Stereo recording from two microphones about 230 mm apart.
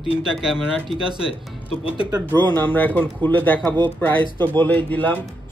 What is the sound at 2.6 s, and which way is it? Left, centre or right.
Speech, centre.